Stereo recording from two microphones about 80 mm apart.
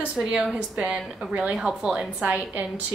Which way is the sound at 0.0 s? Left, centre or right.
Centre.